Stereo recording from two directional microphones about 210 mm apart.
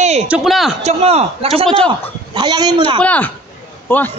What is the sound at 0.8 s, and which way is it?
A man's voice, 30° right (ahead or behind).